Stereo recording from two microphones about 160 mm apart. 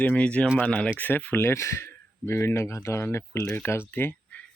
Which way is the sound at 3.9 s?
15° left (ahead or behind).